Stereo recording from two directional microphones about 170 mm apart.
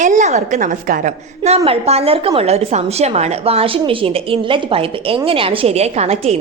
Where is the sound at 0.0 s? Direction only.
45° right (ahead or behind).